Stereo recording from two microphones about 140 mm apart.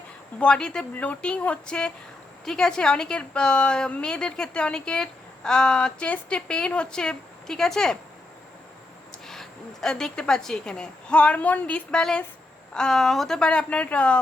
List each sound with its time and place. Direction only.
0.3 s speech: 5° left (ahead or behind)
9.1 s speech: 5° left (ahead or behind)